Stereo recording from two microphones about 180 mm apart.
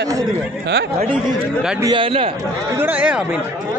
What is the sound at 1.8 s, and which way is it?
Speech, 25° right (ahead or behind).